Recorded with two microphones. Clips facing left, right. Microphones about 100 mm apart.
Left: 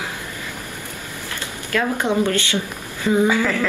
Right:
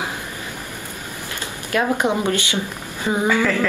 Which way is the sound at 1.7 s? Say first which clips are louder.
Right 1 dB; 20° right (ahead or behind).